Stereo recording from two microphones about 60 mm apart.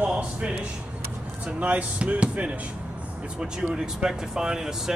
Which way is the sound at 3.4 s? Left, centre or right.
Centre.